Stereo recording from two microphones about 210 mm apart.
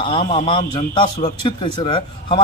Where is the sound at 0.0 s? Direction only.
25° left (ahead or behind).